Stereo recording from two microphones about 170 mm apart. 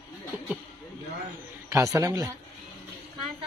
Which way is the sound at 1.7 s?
20° right (ahead or behind).